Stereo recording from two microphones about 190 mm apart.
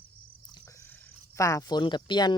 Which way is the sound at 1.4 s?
15° left (ahead or behind).